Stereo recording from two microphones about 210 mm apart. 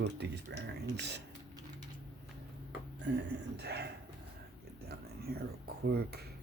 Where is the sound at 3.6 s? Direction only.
50° right (ahead or behind).